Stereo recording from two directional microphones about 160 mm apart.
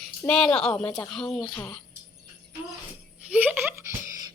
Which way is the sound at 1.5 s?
25° left (ahead or behind).